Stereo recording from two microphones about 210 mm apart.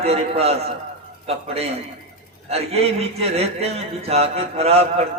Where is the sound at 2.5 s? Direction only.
30° right (ahead or behind).